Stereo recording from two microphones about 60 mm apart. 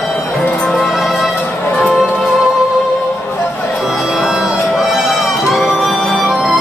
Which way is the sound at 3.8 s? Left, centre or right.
Centre.